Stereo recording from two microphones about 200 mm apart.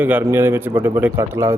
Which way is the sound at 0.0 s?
10° right (ahead or behind).